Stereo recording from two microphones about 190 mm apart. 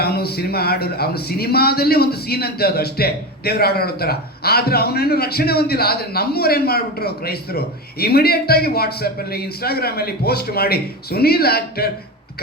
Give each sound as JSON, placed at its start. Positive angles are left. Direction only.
{"t": 0.0, "sound": "a man's voice", "side_deg": 55}